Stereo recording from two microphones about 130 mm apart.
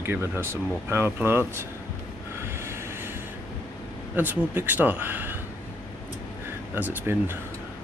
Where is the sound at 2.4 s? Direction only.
20° right (ahead or behind).